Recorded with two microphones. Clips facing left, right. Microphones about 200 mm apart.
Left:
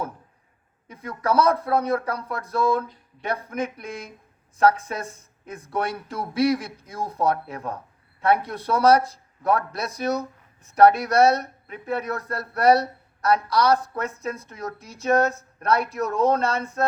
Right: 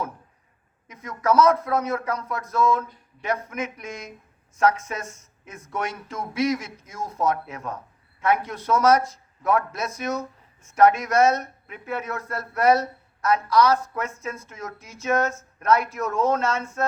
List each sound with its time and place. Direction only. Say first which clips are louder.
0.9 s a man's voice: right 2 dB; 30° left (ahead or behind)